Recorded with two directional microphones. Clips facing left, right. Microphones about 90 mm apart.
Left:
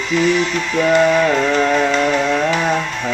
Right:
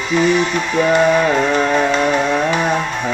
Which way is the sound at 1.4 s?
20° right (ahead or behind).